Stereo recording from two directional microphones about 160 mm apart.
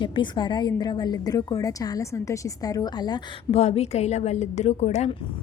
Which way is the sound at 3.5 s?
40° left (ahead or behind).